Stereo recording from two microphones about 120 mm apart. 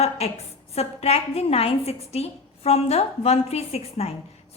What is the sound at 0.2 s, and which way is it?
A woman's voice, 60° left (ahead or behind).